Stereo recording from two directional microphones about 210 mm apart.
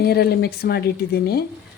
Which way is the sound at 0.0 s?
50° left (ahead or behind).